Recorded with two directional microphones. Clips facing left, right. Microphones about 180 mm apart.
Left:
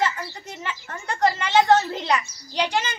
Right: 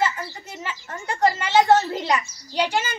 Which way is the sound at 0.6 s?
10° right (ahead or behind).